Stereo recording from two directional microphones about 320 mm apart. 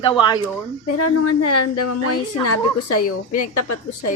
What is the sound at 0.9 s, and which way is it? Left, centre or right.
A woman's voice, left.